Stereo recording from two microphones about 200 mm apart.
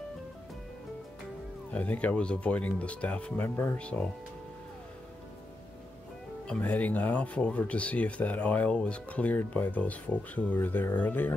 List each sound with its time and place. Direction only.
1.7 s speech: 5° left (ahead or behind)
6.4 s speech: 5° left (ahead or behind)